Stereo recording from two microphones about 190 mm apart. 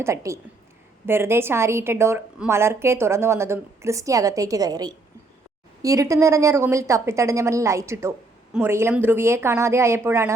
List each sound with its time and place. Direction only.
0.0 s a woman's voice: 15° right (ahead or behind)